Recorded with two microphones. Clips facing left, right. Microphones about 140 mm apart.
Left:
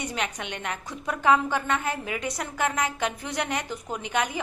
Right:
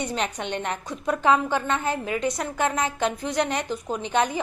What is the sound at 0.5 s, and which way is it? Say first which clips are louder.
A woman's voice: right 5 dB; 30° right (ahead or behind).